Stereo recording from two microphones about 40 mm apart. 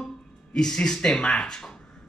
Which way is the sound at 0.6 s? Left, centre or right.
Centre.